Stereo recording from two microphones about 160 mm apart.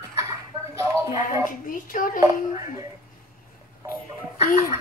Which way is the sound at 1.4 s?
60° left (ahead or behind).